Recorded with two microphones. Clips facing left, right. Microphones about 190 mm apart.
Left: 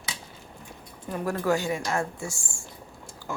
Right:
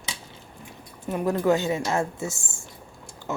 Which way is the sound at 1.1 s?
20° right (ahead or behind).